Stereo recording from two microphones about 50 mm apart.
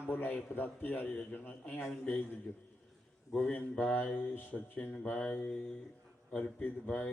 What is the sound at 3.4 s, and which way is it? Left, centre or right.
Speech, left.